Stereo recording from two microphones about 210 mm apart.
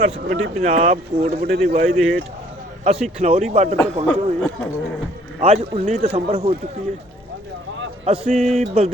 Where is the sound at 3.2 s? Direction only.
30° right (ahead or behind).